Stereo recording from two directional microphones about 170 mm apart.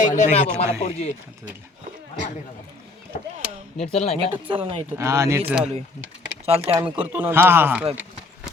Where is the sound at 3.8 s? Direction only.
40° left (ahead or behind).